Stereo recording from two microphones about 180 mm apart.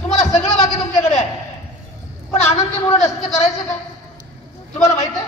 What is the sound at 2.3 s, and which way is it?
A man's voice, 35° left (ahead or behind).